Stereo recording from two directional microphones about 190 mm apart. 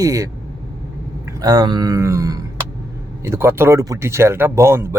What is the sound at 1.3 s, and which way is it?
Speech, 20° right (ahead or behind).